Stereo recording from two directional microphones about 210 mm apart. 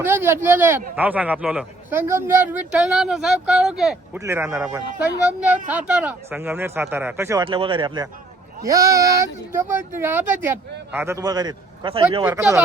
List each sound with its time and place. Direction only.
0.0 s a man's voice: 10° right (ahead or behind)
7.4 s a man's voice: 25° right (ahead or behind)
12.2 s a man's voice: 10° right (ahead or behind)